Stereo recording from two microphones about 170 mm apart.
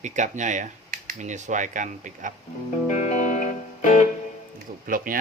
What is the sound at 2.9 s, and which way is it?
Music, 45° left (ahead or behind).